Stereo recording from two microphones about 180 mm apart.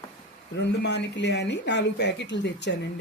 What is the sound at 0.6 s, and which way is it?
Speech, 75° left (ahead or behind).